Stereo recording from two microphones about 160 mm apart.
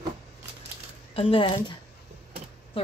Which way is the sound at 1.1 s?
35° left (ahead or behind).